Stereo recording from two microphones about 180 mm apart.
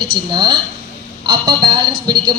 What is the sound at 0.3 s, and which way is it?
A woman's voice, 25° right (ahead or behind).